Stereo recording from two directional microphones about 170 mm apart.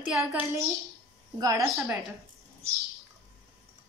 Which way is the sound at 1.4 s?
20° right (ahead or behind).